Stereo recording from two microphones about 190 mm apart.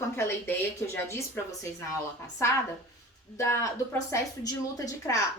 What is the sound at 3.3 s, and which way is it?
A woman's voice, 15° left (ahead or behind).